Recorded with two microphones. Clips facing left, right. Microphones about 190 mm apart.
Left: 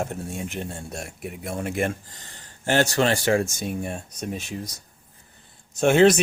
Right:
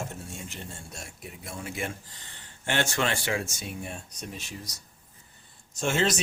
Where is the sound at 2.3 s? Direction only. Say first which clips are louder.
Left 8 dB; 40° left (ahead or behind).